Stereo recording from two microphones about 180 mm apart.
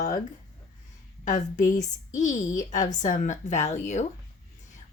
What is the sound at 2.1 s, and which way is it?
A woman's voice, 45° left (ahead or behind).